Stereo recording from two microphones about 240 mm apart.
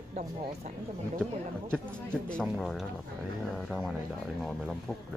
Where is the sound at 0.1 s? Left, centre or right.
Right.